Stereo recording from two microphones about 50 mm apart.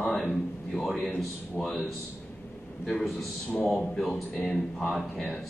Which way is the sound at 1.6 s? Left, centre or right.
Left.